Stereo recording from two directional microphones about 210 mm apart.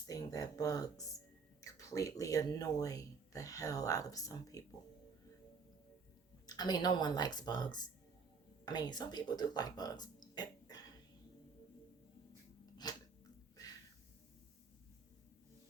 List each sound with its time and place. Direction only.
0.1 s speech: 15° left (ahead or behind)
6.5 s speech: 20° left (ahead or behind)
12.8 s scissors: 20° left (ahead or behind)
13.6 s a sound: 15° left (ahead or behind)